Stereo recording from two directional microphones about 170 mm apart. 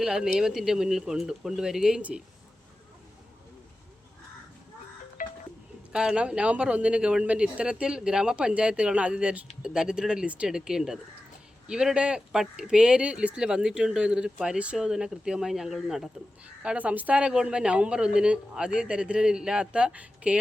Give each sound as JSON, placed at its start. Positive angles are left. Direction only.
{"t": 0.0, "sound": "speech", "side_deg": -5}
{"t": 5.2, "sound": "a sound", "side_deg": 55}
{"t": 5.9, "sound": "speech", "side_deg": -5}